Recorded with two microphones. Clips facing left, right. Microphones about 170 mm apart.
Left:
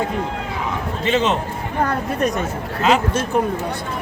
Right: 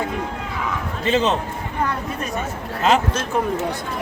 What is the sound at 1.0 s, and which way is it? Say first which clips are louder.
Speech: even; 35° right (ahead or behind).